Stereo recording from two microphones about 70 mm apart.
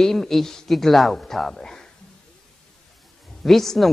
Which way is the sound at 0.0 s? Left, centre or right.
Centre.